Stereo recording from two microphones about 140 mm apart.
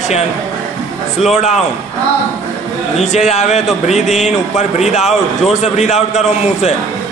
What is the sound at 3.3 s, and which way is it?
A man's voice, 55° left (ahead or behind).